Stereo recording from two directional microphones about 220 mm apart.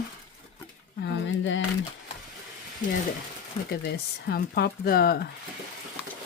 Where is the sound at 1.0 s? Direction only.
60° left (ahead or behind).